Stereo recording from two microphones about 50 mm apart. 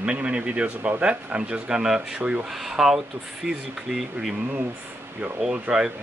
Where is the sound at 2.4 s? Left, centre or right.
Centre.